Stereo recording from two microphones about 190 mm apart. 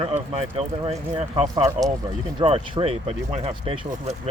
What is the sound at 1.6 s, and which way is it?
Speech, 15° right (ahead or behind).